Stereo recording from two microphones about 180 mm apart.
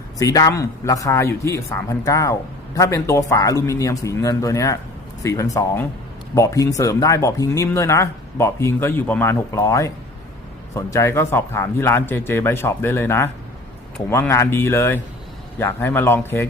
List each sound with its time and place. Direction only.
0.2 s speech: 20° left (ahead or behind)